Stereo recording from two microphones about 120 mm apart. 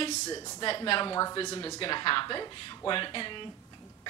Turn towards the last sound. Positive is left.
turn(degrees=45)  # may be behind; listen again after turning